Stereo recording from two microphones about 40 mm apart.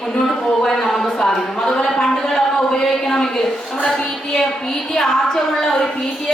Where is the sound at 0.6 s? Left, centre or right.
Centre.